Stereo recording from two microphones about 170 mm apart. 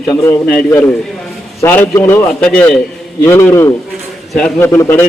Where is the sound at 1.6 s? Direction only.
10° left (ahead or behind).